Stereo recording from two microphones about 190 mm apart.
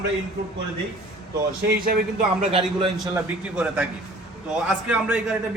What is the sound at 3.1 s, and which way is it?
A man's voice, 10° right (ahead or behind).